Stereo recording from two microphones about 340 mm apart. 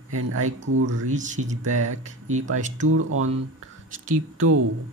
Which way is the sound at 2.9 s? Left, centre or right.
Right.